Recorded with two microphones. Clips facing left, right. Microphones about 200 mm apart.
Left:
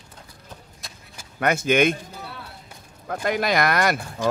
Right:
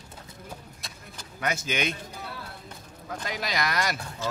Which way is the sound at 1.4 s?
55° left (ahead or behind).